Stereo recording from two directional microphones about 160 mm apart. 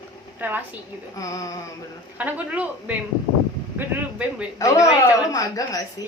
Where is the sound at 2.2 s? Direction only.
10° right (ahead or behind).